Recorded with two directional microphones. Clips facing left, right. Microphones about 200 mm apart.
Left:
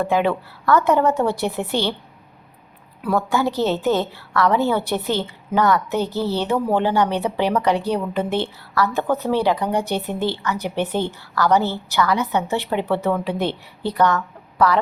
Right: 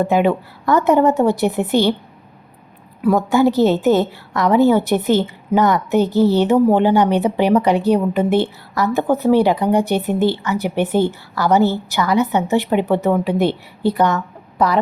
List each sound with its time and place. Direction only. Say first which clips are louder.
0.0 s a woman's voice: right 4 dB; 15° right (ahead or behind)
3.2 s a woman's voice: right 6 dB; 15° right (ahead or behind)